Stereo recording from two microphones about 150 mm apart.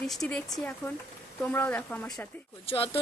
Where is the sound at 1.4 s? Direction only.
15° left (ahead or behind).